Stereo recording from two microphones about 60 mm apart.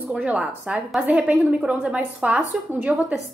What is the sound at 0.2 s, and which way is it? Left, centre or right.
A woman's voice, centre.